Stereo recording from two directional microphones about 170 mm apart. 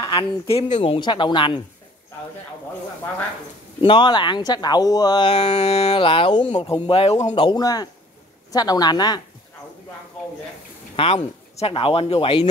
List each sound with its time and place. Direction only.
0.0 s speech: 30° left (ahead or behind)
0.7 s speech: 40° left (ahead or behind)
0.9 s speech: 30° left (ahead or behind)
3.8 s speech: 30° left (ahead or behind)
5.4 s speech: 40° left (ahead or behind)
7.3 s speech: 25° left (ahead or behind)
11.0 s speech: 35° left (ahead or behind)